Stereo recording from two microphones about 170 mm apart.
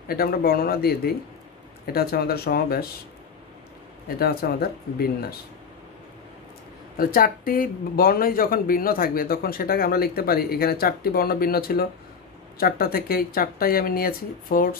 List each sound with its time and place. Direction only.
0.1 s speech: 60° left (ahead or behind)
4.2 s speech: 65° left (ahead or behind)
7.0 s speech: 55° left (ahead or behind)